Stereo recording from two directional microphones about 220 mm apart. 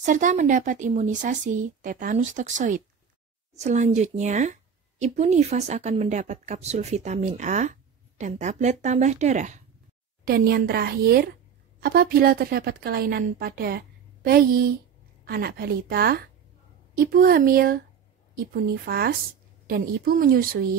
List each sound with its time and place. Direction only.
0.0 s a woman's voice: 35° right (ahead or behind)